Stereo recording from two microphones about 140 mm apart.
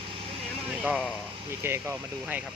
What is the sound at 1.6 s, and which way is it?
Speech, 15° right (ahead or behind).